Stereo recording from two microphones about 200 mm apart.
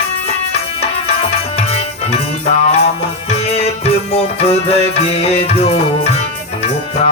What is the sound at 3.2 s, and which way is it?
Music, 30° left (ahead or behind).